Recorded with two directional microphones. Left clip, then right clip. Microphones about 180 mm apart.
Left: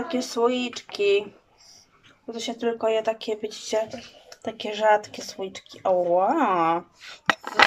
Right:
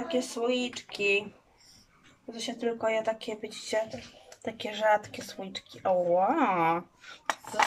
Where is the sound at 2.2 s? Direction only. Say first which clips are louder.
Left 5 dB; 20° right (ahead or behind).